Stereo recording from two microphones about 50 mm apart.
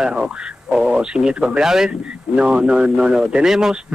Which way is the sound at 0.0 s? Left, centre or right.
Centre.